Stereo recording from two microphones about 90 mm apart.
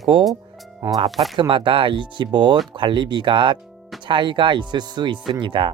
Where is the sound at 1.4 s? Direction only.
70° right (ahead or behind).